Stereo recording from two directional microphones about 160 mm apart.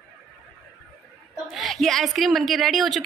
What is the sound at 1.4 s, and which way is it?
A woman's voice, centre (ahead or behind).